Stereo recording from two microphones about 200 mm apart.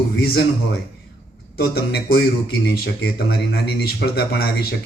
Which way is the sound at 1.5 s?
50° left (ahead or behind).